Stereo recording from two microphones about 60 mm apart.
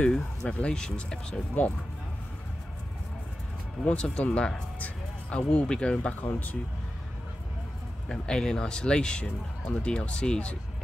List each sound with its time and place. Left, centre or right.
0.0 s speech: centre
3.8 s speech: left
4.7 s music: left
5.4 s speech: centre
6.2 s speech: left
8.1 s speech: centre